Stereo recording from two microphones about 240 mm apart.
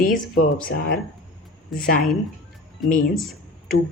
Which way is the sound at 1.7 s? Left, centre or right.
Centre.